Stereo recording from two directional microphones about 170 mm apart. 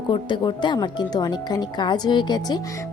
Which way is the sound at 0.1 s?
25° left (ahead or behind).